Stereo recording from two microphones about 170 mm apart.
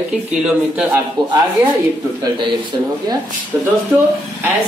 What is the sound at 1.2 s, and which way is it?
Speech, 25° right (ahead or behind).